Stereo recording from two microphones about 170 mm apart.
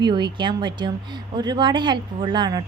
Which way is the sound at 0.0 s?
25° right (ahead or behind).